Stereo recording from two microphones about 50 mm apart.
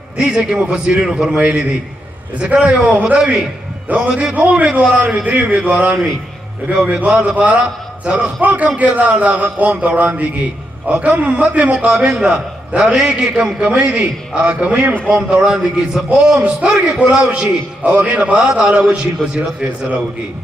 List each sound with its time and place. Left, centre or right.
0.2 s a man's voice: centre